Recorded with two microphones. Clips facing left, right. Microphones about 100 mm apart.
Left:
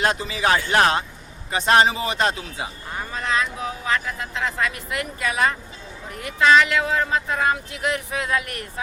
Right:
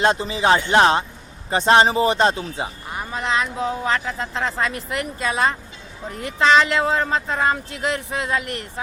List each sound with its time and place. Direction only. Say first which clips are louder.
0.0 s speech: right 3 dB; 30° right (ahead or behind)
2.9 s speech: right 1 dB; 20° right (ahead or behind)